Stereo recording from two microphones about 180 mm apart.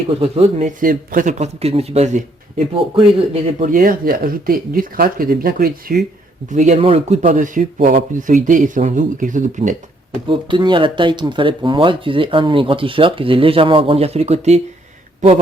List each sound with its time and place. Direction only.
0.2 s a man's voice: 35° right (ahead or behind)
0.8 s a man's voice: 50° right (ahead or behind)
3.7 s speech: 50° right (ahead or behind)
6.5 s speech: 40° right (ahead or behind)
10.2 s speech: 25° right (ahead or behind)